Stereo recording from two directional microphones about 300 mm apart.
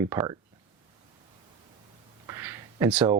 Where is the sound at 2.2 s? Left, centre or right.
Centre.